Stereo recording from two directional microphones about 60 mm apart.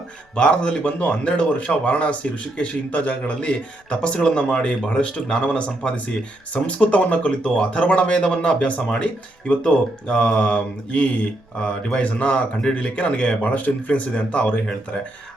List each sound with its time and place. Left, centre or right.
0.3 s speech: centre